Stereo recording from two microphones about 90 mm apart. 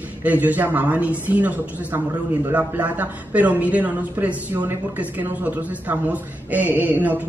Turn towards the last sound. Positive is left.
turn(degrees=-20)  # may be behind; listen again after turning